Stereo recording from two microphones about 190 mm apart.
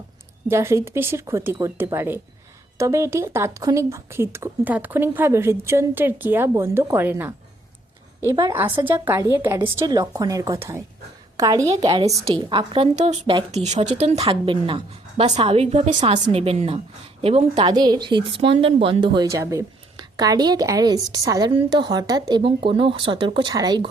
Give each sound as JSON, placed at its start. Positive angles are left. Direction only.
{"t": 0.4, "sound": "speech", "side_deg": -15}
{"t": 8.2, "sound": "a woman's voice", "side_deg": -20}
{"t": 8.5, "sound": "a woman's voice", "side_deg": -10}